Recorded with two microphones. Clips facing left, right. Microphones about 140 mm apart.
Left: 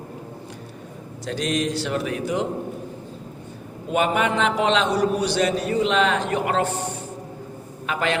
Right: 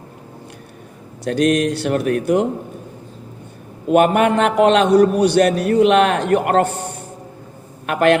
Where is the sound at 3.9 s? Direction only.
55° right (ahead or behind).